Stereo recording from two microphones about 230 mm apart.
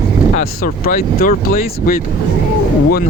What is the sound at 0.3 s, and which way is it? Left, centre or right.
Speech, left.